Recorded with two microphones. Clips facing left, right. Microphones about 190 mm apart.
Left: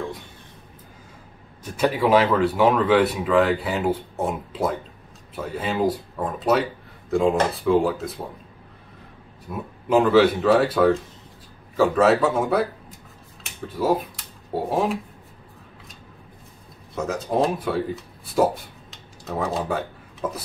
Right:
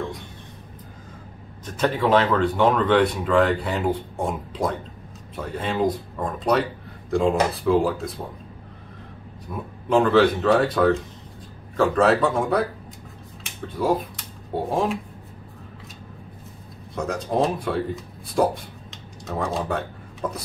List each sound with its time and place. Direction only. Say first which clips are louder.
1.6 s speech: left 1 dB; 10° left (ahead or behind)
9.5 s speech: left 1 dB; 5° left (ahead or behind)
16.9 s speech: even; centre (ahead or behind)